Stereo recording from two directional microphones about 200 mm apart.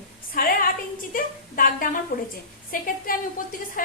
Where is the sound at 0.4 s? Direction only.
45° left (ahead or behind).